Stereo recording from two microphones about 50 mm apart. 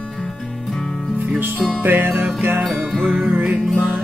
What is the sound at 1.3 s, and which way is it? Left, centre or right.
Music, right.